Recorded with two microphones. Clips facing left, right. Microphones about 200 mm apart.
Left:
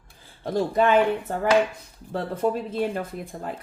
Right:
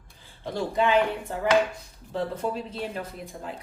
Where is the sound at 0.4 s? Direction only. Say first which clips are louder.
Left 4 dB; 50° left (ahead or behind).